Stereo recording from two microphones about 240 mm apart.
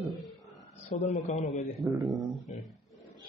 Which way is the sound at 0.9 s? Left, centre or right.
Left.